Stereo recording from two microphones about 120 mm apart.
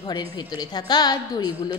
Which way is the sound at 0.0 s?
40° left (ahead or behind).